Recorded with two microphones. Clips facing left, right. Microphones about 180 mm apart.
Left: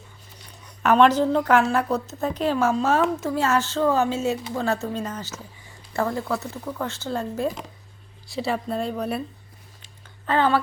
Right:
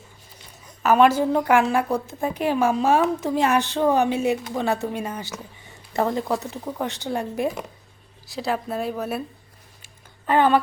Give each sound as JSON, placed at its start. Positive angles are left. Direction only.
{"t": 0.8, "sound": "a woman's voice", "side_deg": -5}
{"t": 8.3, "sound": "speech", "side_deg": 0}
{"t": 9.8, "sound": "a sound", "side_deg": -15}